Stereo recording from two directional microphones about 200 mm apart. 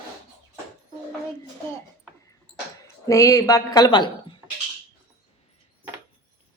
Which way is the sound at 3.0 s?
15° left (ahead or behind).